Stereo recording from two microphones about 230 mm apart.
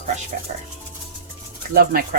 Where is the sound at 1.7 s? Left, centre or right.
Right.